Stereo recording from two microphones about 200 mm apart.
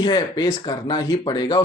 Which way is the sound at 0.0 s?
20° left (ahead or behind).